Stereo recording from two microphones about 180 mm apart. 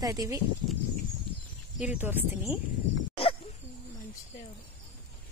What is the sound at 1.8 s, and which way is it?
Speech, 10° right (ahead or behind).